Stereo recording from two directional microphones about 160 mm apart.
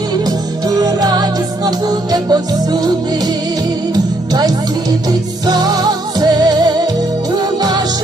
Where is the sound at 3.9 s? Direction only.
25° right (ahead or behind).